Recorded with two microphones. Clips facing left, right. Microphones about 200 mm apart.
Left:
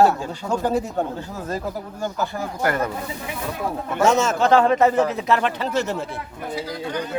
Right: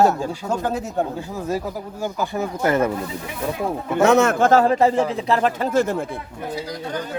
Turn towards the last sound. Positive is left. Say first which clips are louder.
# right 4 dB
turn(degrees=-50)  # may be behind; listen again after turning